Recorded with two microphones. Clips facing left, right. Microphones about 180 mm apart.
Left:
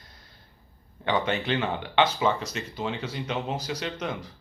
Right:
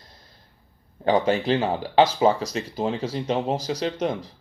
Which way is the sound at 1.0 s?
40° right (ahead or behind).